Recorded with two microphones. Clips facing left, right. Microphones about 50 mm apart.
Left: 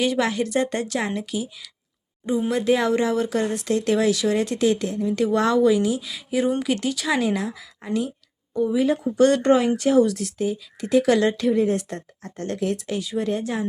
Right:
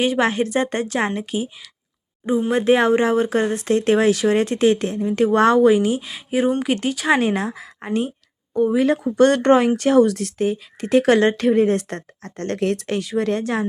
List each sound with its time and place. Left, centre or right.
0.0 s speech: right
2.5 s speech: right
8.5 s speech: right